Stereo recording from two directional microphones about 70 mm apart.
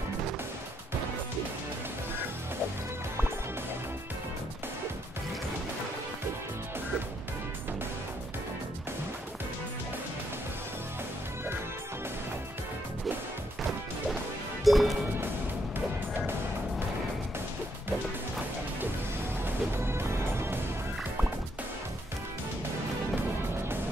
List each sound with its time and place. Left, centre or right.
14.6 s music: centre
19.4 s music: right